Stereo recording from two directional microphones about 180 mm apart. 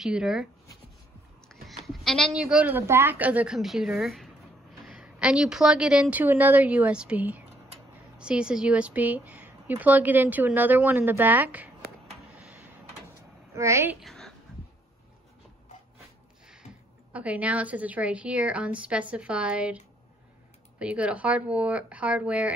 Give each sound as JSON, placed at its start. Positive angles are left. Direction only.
{"t": 0.0, "sound": "a woman's voice", "side_deg": -5}
{"t": 1.5, "sound": "bleat", "side_deg": 0}
{"t": 1.9, "sound": "a woman's voice", "side_deg": 0}
{"t": 12.4, "sound": "a sound", "side_deg": -10}
{"t": 13.6, "sound": "a woman's voice", "side_deg": -15}
{"t": 14.0, "sound": "a sound", "side_deg": 0}
{"t": 17.1, "sound": "a woman's voice", "side_deg": -5}
{"t": 20.8, "sound": "a woman's voice", "side_deg": -5}